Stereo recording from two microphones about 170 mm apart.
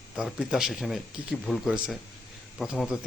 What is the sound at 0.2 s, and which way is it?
Speech, centre (ahead or behind).